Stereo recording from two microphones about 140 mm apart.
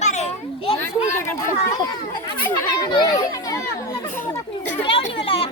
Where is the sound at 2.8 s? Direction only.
30° left (ahead or behind).